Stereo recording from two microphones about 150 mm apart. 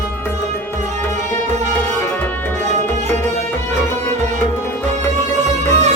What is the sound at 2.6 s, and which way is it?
Music, 50° right (ahead or behind).